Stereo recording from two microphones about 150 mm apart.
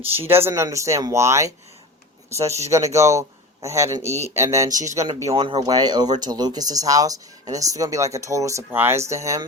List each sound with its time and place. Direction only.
0.2 s speech: 15° right (ahead or behind)
5.3 s speech: 40° right (ahead or behind)
5.5 s speech: 25° right (ahead or behind)